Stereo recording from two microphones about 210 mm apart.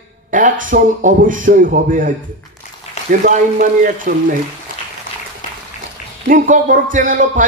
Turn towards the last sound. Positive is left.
turn(degrees=-40)  # may be behind; listen again after turning